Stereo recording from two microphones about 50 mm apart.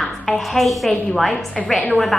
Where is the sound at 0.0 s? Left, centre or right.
Centre.